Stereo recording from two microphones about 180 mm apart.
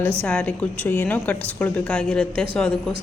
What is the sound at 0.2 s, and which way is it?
A woman's voice, 5° left (ahead or behind).